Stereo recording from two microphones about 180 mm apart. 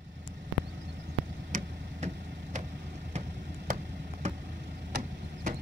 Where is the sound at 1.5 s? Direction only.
40° right (ahead or behind).